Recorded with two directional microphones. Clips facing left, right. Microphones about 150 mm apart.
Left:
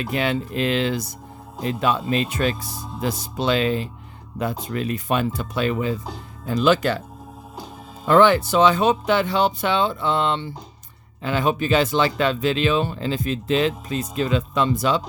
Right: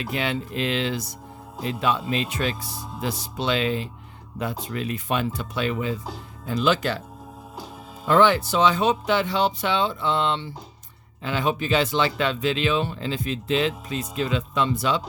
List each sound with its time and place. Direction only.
0.0 s speech: 45° left (ahead or behind)
8.0 s speech: 55° left (ahead or behind)